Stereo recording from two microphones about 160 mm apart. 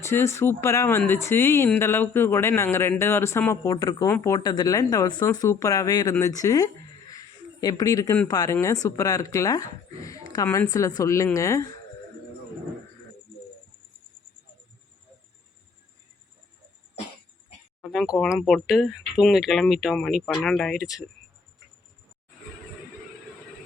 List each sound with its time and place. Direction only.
0.0 s speech: 15° left (ahead or behind)
4.4 s speech: 30° left (ahead or behind)
17.8 s speech: centre (ahead or behind)